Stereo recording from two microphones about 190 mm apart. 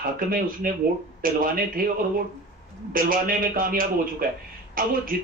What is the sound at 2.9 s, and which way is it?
A man's voice, 45° right (ahead or behind).